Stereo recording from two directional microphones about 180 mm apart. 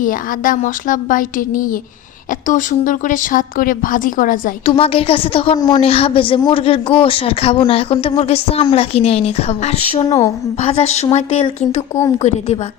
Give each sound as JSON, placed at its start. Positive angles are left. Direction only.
{"t": 0.0, "sound": "speech", "side_deg": 50}
{"t": 4.6, "sound": "speech", "side_deg": 30}
{"t": 10.1, "sound": "a woman's voice", "side_deg": 15}
{"t": 10.6, "sound": "speech", "side_deg": 35}